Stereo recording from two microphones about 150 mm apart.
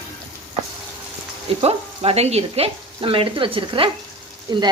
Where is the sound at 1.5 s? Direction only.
40° right (ahead or behind).